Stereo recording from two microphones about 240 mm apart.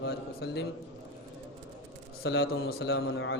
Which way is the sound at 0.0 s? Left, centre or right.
Left.